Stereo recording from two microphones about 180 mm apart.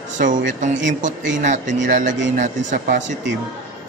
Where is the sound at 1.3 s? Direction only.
45° right (ahead or behind).